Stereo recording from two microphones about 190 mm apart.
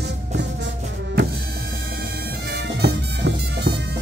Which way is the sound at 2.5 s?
60° right (ahead or behind).